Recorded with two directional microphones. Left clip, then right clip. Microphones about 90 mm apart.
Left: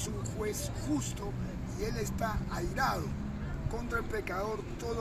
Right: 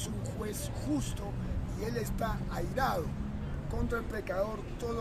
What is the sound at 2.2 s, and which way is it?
Music, 55° right (ahead or behind).